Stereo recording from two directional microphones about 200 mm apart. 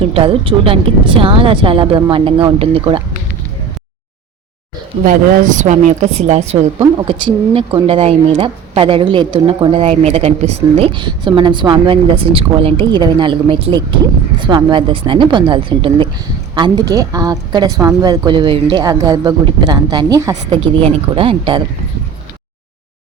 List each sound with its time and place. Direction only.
0.1 s speech: 30° right (ahead or behind)
5.0 s a woman's voice: 40° right (ahead or behind)